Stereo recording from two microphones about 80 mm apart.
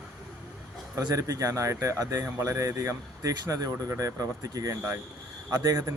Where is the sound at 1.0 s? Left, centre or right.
Right.